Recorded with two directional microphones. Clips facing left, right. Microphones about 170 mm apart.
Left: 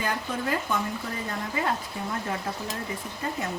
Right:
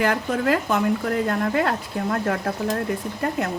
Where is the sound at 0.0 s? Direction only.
75° right (ahead or behind).